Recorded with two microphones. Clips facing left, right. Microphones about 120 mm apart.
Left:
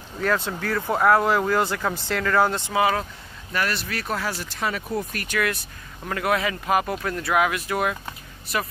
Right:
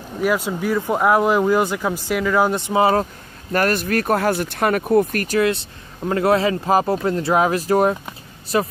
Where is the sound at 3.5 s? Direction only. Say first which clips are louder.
Right 8 dB; 45° right (ahead or behind).